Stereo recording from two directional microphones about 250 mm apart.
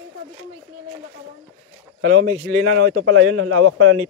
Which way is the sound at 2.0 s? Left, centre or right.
Right.